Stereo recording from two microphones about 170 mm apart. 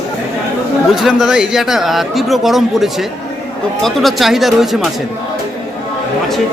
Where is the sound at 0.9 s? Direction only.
Centre (ahead or behind).